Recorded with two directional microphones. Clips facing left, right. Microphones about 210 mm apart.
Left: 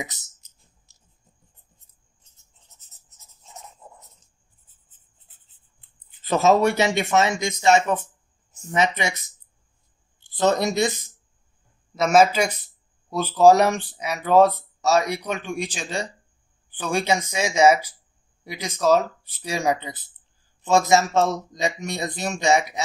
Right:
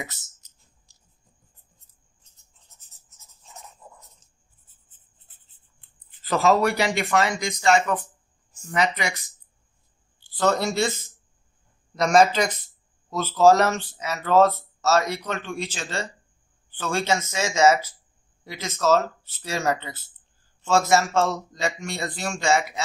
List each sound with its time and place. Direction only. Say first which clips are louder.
3.8 s writing: left 1 dB; 20° left (ahead or behind)
6.2 s speech: left 2 dB; 20° left (ahead or behind)
10.3 s speech: left 2 dB; 20° left (ahead or behind)
11.9 s speech: left 1 dB; 5° left (ahead or behind)